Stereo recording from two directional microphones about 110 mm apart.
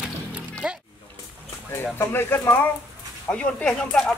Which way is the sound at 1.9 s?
20° left (ahead or behind).